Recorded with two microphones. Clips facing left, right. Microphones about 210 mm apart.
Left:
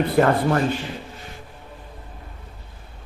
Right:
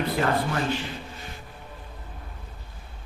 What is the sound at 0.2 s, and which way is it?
Speech, 50° left (ahead or behind).